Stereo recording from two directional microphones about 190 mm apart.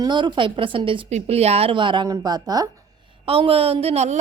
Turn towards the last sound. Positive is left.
turn(degrees=-35)  # may be behind; listen again after turning